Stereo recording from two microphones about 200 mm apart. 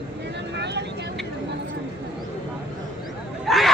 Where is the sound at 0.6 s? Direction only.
60° right (ahead or behind).